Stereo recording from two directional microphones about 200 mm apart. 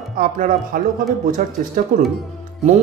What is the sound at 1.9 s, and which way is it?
Speech, 45° right (ahead or behind).